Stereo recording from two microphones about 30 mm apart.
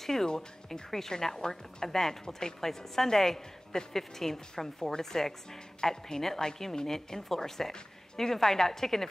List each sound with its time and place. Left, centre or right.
0.0 s a woman's voice: centre